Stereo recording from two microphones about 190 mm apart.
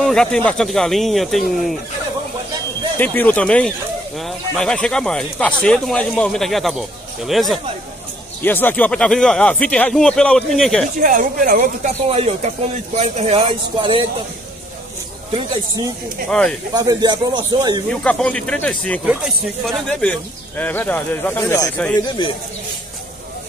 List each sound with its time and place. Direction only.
0.0 s snake: 5° left (ahead or behind)
0.5 s speech: centre (ahead or behind)
3.0 s speech: 10° left (ahead or behind)
11.0 s speech: 45° right (ahead or behind)
12.1 s speech: 30° right (ahead or behind)
15.3 s speech: 20° right (ahead or behind)
16.3 s speech: 5° left (ahead or behind)
16.7 s speech: 20° right (ahead or behind)
17.8 s a man's voice: 5° left (ahead or behind); by 22.3 s 20° left (ahead or behind)